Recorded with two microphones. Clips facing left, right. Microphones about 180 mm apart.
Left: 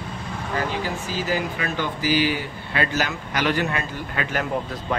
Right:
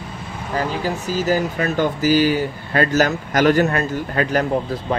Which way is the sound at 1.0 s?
45° right (ahead or behind).